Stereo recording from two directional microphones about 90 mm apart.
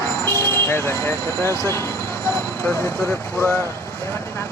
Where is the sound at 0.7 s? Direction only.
25° left (ahead or behind).